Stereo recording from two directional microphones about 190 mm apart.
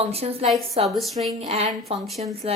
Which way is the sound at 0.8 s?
Centre (ahead or behind).